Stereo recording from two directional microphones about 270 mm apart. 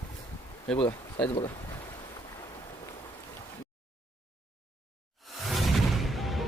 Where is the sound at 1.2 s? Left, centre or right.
Centre.